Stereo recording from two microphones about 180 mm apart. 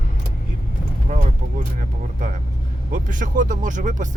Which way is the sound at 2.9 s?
45° right (ahead or behind).